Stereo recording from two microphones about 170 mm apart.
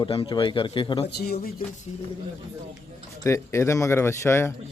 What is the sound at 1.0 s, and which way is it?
Speech, 70° left (ahead or behind).